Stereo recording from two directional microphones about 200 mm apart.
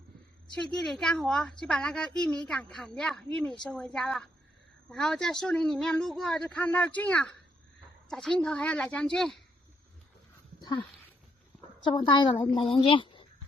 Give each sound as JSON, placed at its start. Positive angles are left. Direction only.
{"t": 0.7, "sound": "speech", "side_deg": 5}
{"t": 11.8, "sound": "a woman's voice", "side_deg": 20}